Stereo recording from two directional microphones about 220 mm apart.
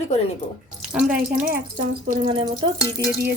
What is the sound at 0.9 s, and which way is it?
Speech, 5° right (ahead or behind).